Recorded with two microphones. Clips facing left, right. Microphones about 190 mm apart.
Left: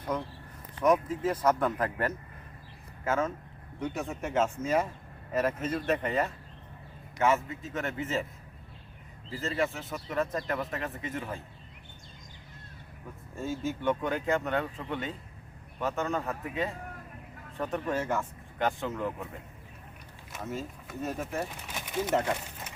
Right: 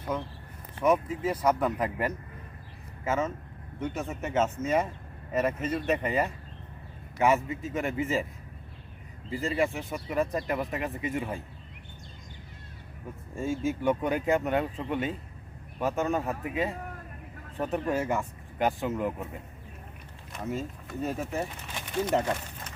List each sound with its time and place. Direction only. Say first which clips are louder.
0.9 s speech: even; 10° right (ahead or behind)
9.4 s speech: right 3 dB; 15° right (ahead or behind)
13.4 s speech: right 3 dB; 15° right (ahead or behind)
20.5 s speech: right 4 dB; centre (ahead or behind)
21.7 s bird: right 1 dB; 5° left (ahead or behind)